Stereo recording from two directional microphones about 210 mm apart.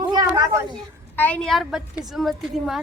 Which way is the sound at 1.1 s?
10° left (ahead or behind).